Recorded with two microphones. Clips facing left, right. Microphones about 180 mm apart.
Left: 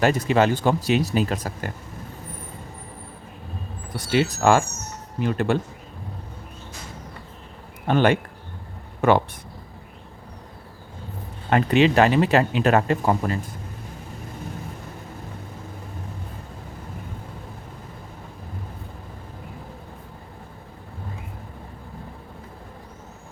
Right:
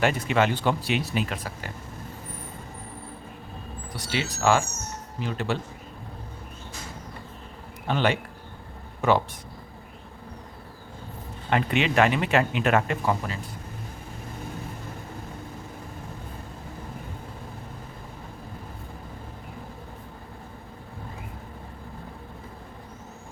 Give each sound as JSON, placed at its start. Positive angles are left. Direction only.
{"t": 0.0, "sound": "speech", "side_deg": 40}
{"t": 3.9, "sound": "speech", "side_deg": 50}
{"t": 7.9, "sound": "speech", "side_deg": 50}
{"t": 11.5, "sound": "speech", "side_deg": 35}